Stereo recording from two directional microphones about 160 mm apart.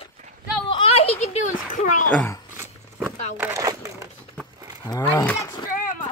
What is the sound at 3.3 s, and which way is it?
Speech, 15° right (ahead or behind).